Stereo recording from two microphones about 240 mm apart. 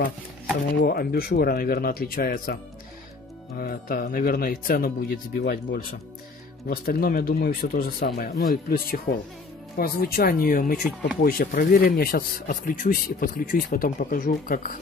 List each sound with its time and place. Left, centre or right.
0.8 s speech: left